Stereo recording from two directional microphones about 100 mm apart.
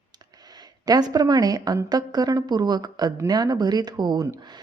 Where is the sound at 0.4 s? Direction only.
40° right (ahead or behind).